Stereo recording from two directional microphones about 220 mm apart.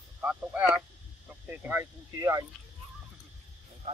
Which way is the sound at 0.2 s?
5° right (ahead or behind).